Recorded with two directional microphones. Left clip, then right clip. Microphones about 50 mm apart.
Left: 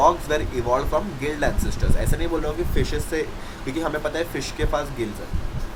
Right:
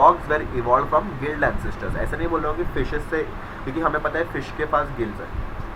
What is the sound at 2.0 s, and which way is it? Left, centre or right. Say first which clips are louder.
Speech: right 3 dB; left.